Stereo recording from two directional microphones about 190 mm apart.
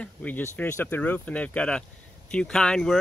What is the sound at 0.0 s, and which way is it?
Speech, 10° left (ahead or behind).